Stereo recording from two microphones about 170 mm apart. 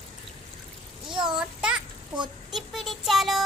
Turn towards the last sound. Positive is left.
turn(degrees=0)  # may be behind; listen again after turning